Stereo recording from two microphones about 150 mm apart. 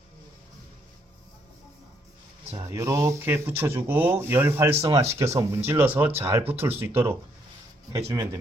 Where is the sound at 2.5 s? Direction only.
20° right (ahead or behind).